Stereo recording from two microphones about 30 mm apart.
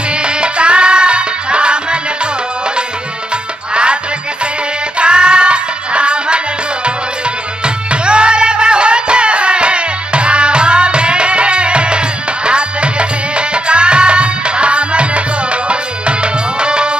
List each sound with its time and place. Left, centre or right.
0.1 s music: right
3.7 s music: right
13.4 s tabla: right